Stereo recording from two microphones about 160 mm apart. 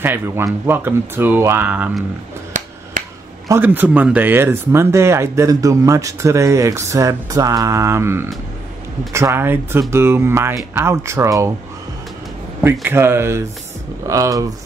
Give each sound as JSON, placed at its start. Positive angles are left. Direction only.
{"t": 0.0, "sound": "speech", "side_deg": -15}
{"t": 2.9, "sound": "finger snapping", "side_deg": -55}
{"t": 3.4, "sound": "speech", "side_deg": -15}
{"t": 12.8, "sound": "speech", "side_deg": -15}